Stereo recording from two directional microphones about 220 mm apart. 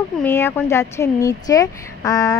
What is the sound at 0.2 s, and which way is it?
Speech, 10° left (ahead or behind).